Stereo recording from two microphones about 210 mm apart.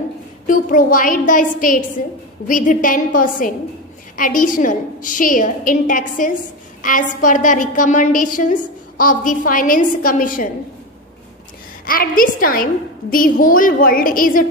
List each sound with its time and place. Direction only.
0.5 s a woman's voice: 40° left (ahead or behind)
11.8 s a woman's voice: 45° left (ahead or behind)